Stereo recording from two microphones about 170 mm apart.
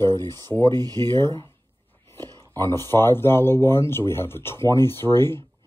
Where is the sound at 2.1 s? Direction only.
25° right (ahead or behind).